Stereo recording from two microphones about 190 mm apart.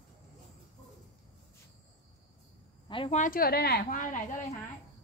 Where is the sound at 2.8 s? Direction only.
25° left (ahead or behind).